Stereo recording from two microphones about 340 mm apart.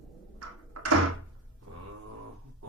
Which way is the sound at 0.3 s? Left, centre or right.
Right.